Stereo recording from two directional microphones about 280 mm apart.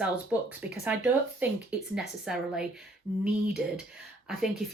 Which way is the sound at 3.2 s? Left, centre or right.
Centre.